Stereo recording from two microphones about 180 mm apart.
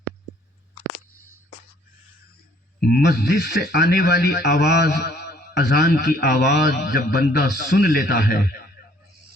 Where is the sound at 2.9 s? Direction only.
65° left (ahead or behind).